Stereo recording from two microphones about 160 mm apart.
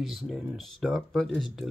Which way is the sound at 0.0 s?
Centre (ahead or behind).